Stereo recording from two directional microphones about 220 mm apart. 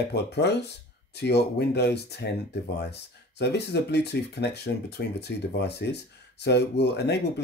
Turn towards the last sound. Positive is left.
turn(degrees=50)  # may be behind; listen again after turning